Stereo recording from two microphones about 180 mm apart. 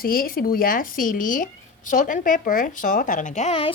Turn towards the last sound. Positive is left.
turn(degrees=35)  # may be behind; listen again after turning